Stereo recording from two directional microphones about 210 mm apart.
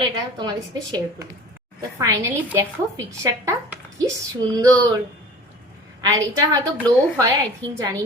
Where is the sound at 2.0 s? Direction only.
15° right (ahead or behind).